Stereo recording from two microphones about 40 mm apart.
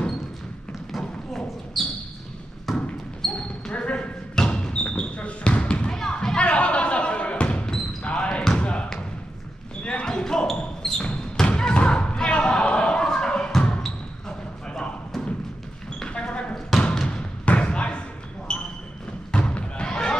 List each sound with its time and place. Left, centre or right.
0.9 s a sound: centre
2.7 s basketball bounce: centre
3.2 s basketball bounce: centre
3.7 s basketball bounce: left
5.9 s basketball bounce: centre
6.4 s basketball bounce: left
10.0 s basketball bounce: centre
11.4 s thump: left
14.7 s a sound: centre
16.1 s basketball bounce: left
17.1 s thump: left
18.5 s basketball bounce: left
19.3 s thump: left